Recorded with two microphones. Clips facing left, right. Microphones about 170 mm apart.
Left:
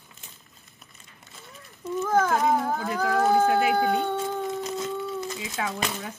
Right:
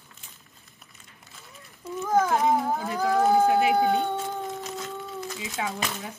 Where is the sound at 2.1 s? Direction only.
20° right (ahead or behind).